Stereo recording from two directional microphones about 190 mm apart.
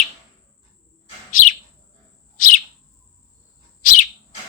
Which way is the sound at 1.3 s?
45° left (ahead or behind).